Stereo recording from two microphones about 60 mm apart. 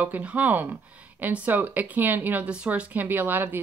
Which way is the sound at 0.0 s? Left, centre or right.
Right.